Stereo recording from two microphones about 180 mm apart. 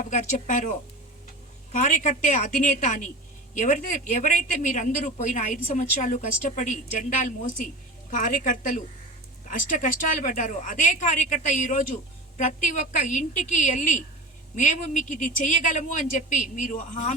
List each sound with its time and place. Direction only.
0.0 s a woman's voice: 45° left (ahead or behind)